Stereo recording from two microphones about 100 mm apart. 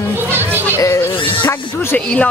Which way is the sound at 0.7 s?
30° left (ahead or behind).